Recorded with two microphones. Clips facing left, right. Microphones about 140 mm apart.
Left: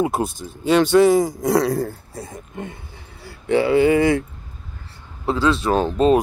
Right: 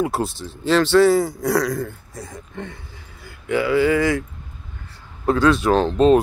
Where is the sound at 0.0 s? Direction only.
20° left (ahead or behind).